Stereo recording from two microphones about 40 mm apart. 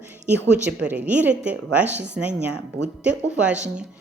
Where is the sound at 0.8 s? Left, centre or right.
Right.